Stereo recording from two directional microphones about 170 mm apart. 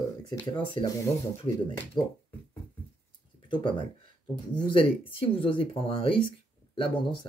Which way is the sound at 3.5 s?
30° left (ahead or behind).